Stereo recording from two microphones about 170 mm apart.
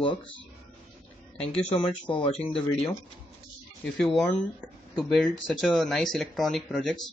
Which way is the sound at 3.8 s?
5° left (ahead or behind).